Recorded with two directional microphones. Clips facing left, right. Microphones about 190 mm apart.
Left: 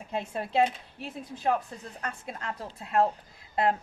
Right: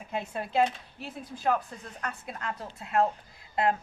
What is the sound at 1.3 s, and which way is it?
Speech, 25° left (ahead or behind).